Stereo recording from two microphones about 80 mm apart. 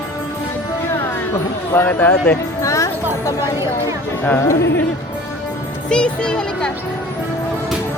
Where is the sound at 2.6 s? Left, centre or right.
Left.